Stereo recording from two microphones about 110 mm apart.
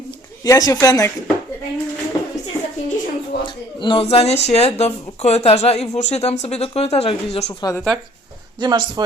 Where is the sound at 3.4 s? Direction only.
45° left (ahead or behind).